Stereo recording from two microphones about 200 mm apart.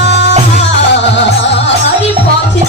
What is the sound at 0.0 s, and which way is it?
Music, 60° left (ahead or behind).